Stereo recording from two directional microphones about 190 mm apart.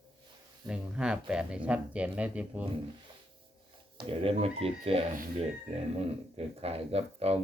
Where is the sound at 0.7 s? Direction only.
5° right (ahead or behind).